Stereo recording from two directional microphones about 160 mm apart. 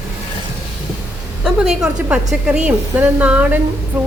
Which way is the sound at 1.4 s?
5° right (ahead or behind).